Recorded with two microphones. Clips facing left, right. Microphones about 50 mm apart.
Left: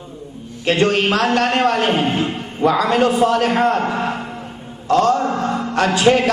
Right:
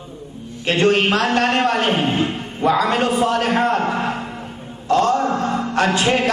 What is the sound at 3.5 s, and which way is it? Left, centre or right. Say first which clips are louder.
Speech: left 1 dB; left.